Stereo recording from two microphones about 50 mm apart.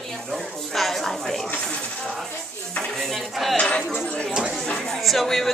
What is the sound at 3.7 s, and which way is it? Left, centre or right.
Chatter, left.